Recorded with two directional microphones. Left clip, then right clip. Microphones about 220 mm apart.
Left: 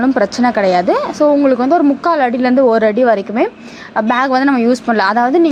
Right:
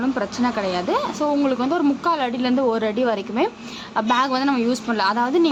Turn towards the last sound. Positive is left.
turn(degrees=20)  # may be behind; listen again after turning